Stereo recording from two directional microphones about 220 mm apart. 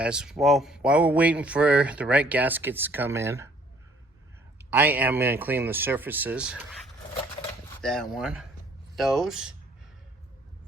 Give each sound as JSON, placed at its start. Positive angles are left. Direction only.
{"t": 0.0, "sound": "speech", "side_deg": -5}
{"t": 4.5, "sound": "speech", "side_deg": -10}
{"t": 7.8, "sound": "speech", "side_deg": 0}